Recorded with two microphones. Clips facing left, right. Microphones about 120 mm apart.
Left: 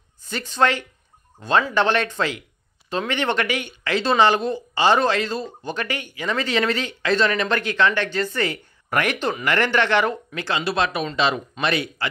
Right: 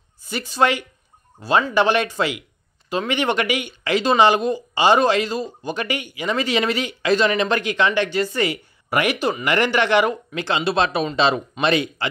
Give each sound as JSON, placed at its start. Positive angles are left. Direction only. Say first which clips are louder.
{"t": 0.2, "sound": "a man's voice", "louder": "right 1 dB", "side_deg": -10}